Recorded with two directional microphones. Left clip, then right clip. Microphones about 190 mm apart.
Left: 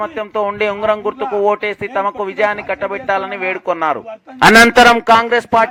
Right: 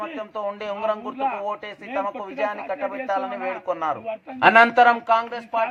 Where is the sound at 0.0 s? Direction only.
35° left (ahead or behind).